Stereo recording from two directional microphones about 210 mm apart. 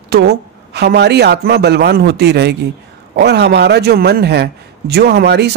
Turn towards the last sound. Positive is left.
turn(degrees=-50)  # may be behind; listen again after turning